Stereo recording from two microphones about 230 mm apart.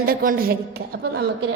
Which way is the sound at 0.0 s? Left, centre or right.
Right.